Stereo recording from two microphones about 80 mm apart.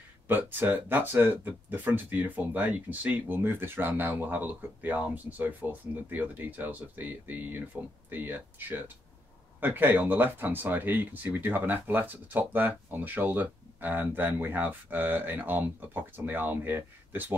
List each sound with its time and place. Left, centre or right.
0.3 s speech: right